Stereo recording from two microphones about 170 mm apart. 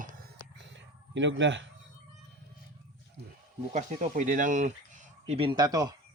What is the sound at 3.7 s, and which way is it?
Speech, 50° right (ahead or behind).